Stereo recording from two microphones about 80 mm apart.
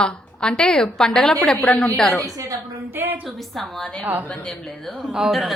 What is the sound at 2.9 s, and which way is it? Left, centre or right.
Speech, right.